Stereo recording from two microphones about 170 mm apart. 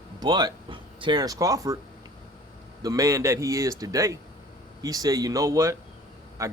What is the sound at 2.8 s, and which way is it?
Speech, 20° right (ahead or behind).